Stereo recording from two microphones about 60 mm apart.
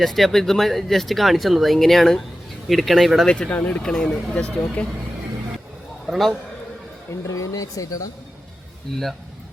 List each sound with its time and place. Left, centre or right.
0.0 s speech: centre
3.2 s speech: centre
3.5 s speech: left
3.8 s speech: centre
6.1 s speech: centre
7.1 s speech: left
8.9 s speech: centre